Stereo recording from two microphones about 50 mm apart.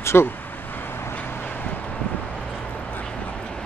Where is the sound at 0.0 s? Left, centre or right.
Left.